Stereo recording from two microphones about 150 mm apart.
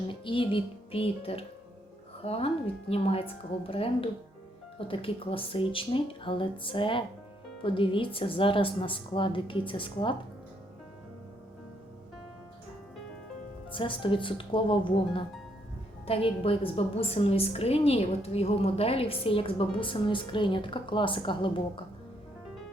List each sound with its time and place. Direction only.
0.1 s a woman's voice: 35° left (ahead or behind)
13.7 s a woman's voice: 35° left (ahead or behind)